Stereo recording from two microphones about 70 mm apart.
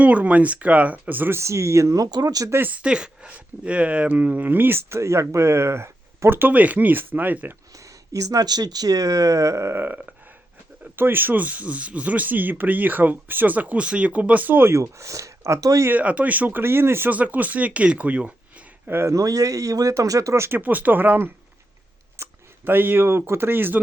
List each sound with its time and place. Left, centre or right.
0.0 s speech: right
1.4 s speech: right
2.0 s speech: right
2.5 s speech: right
2.7 s speech: centre
7.8 s speech: right
14.8 s speech: right
15.9 s speech: right
17.1 s speech: right
18.9 s speech: right
19.1 s speech: right
20.6 s speech: right
22.2 s a sound: right
22.6 s speech: right